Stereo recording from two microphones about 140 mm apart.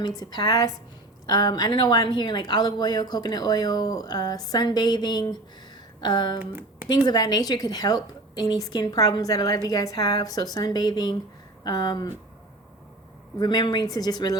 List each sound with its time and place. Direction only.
0.2 s speech: 30° left (ahead or behind)
6.0 s a sound: 30° left (ahead or behind)
6.4 s speech: 15° right (ahead or behind)
6.8 s speech: 30° left (ahead or behind)
13.4 s speech: 30° left (ahead or behind)